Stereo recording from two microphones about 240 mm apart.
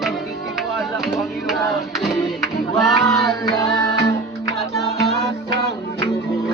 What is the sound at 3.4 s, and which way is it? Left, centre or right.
Music, centre.